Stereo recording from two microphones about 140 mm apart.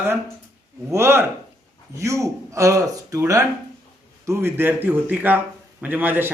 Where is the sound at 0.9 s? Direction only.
20° right (ahead or behind).